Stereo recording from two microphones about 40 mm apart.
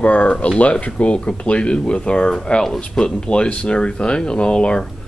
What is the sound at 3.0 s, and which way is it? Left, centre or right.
Speech, left.